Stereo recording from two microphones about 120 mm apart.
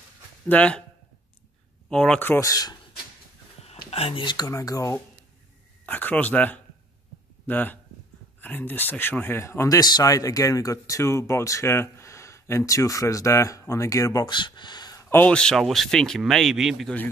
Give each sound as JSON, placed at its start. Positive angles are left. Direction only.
{"t": 0.5, "sound": "speech", "side_deg": 10}
{"t": 1.9, "sound": "speech", "side_deg": 5}
{"t": 2.1, "sound": "speech", "side_deg": 15}
{"t": 2.4, "sound": "speech", "side_deg": 30}
{"t": 3.6, "sound": "whispering", "side_deg": 55}
{"t": 4.5, "sound": "speech", "side_deg": 25}
{"t": 5.9, "sound": "speech", "side_deg": 15}
{"t": 14.3, "sound": "a sound", "side_deg": 40}
{"t": 15.0, "sound": "speech", "side_deg": 15}